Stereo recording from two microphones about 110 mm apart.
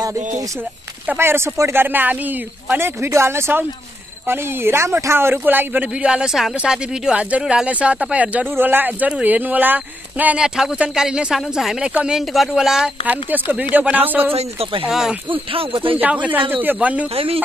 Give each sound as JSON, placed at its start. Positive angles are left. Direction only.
{"t": 1.0, "sound": "speech", "side_deg": -20}
{"t": 13.0, "sound": "speech", "side_deg": -15}
{"t": 14.3, "sound": "speech", "side_deg": -60}
{"t": 14.9, "sound": "speech", "side_deg": -5}
{"t": 15.2, "sound": "speech", "side_deg": -55}
{"t": 16.0, "sound": "speech", "side_deg": -15}
{"t": 17.1, "sound": "speech", "side_deg": -60}